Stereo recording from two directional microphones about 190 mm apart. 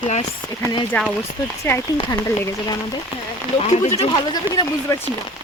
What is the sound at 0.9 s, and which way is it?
Speech, 10° left (ahead or behind).